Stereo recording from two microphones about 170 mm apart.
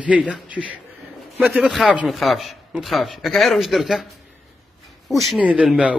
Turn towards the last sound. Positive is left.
turn(degrees=-5)  # may be behind; listen again after turning